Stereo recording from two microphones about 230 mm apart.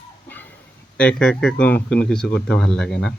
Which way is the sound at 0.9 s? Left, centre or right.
Centre.